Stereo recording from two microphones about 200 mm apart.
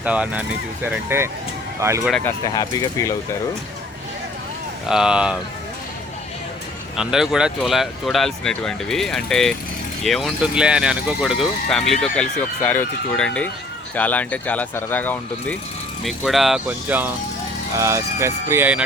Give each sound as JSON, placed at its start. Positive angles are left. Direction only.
{"t": 0.0, "sound": "speech", "side_deg": -5}
{"t": 2.0, "sound": "speech", "side_deg": 5}
{"t": 2.4, "sound": "speech", "side_deg": 20}
{"t": 4.9, "sound": "speech", "side_deg": -5}
{"t": 6.9, "sound": "speech", "side_deg": -5}